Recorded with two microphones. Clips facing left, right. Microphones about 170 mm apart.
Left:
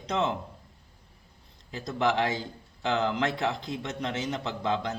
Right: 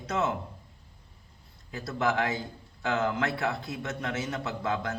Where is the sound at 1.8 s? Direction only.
20° left (ahead or behind).